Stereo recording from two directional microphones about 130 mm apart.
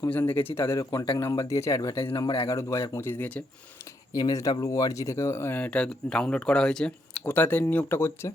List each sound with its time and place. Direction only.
0.1 s speech: 15° left (ahead or behind); by 1.2 s 35° left (ahead or behind)
1.2 s speech: 25° left (ahead or behind)
2.0 s speech: 40° left (ahead or behind)
2.5 s speech: 20° left (ahead or behind)
4.1 s speech: 25° left (ahead or behind)